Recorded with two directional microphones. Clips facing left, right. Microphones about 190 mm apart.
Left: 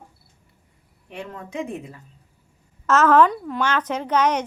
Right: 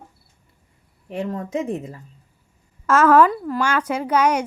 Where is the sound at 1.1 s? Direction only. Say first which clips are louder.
Right 8 dB; 40° right (ahead or behind).